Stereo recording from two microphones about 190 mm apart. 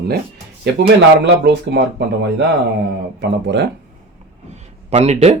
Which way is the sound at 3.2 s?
65° right (ahead or behind).